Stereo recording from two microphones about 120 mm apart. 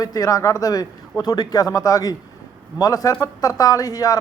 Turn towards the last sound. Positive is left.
turn(degrees=30)  # may be behind; listen again after turning